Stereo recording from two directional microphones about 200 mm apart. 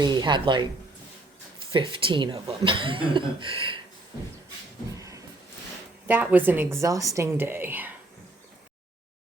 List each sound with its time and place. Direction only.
0.0 s speech: 20° right (ahead or behind)
1.7 s speech: 25° right (ahead or behind)
4.9 s a sound: 15° right (ahead or behind)
6.1 s a woman's voice: 10° right (ahead or behind)